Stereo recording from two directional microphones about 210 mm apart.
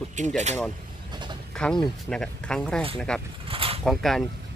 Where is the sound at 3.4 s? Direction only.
25° right (ahead or behind).